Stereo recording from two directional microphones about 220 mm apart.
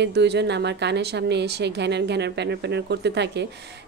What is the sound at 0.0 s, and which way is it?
A woman's voice, 50° right (ahead or behind).